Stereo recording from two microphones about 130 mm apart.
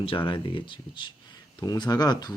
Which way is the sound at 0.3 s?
40° left (ahead or behind).